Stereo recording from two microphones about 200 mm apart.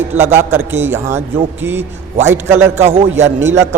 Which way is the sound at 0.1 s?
10° right (ahead or behind).